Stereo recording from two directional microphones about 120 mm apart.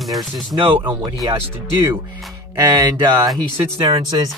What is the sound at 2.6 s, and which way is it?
Speech, 35° right (ahead or behind).